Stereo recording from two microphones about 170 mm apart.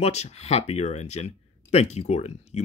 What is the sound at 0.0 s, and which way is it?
Speech, 40° left (ahead or behind).